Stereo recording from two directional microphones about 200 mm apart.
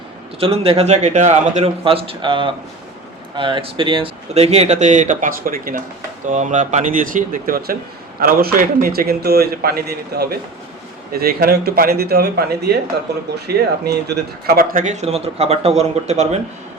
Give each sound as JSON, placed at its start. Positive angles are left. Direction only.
{"t": 0.3, "sound": "a man's voice", "side_deg": -30}